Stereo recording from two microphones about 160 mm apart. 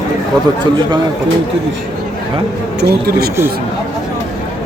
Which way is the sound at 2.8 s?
80° right.